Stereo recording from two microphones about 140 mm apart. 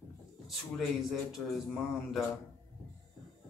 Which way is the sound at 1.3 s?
Centre (ahead or behind).